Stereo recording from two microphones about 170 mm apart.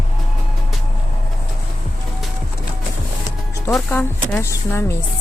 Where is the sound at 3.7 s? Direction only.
10° left (ahead or behind).